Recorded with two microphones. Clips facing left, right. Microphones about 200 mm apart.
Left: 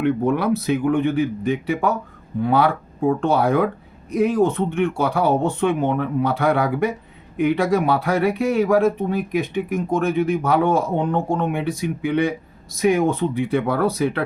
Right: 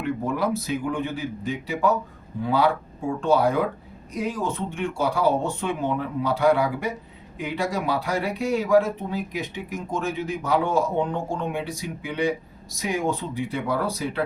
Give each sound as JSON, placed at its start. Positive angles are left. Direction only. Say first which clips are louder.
{"t": 0.0, "sound": "speech", "louder": "left 6 dB", "side_deg": 65}